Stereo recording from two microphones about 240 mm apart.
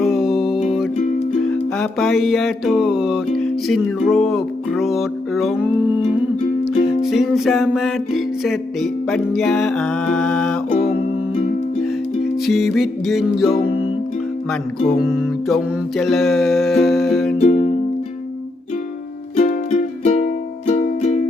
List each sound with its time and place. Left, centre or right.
0.0 s music: centre
1.8 s music: centre
7.0 s music: centre
12.5 s music: centre
14.8 s music: centre
17.3 s music: left
19.4 s music: left